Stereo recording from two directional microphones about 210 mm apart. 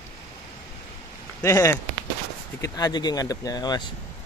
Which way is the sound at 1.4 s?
15° left (ahead or behind).